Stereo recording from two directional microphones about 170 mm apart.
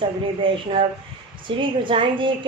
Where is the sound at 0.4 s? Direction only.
30° right (ahead or behind).